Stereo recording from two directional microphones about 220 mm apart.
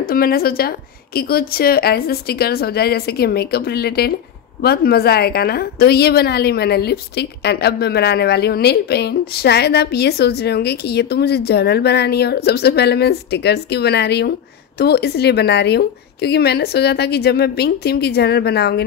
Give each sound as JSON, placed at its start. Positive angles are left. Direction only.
{"t": 0.0, "sound": "a woman's voice", "side_deg": 40}